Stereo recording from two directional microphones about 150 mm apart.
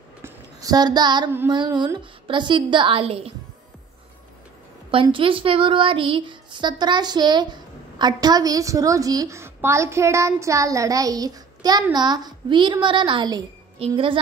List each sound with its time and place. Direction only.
0.2 s a sound: 25° right (ahead or behind)
1.5 s speech: 30° right (ahead or behind)
4.9 s a woman's voice: 35° right (ahead or behind)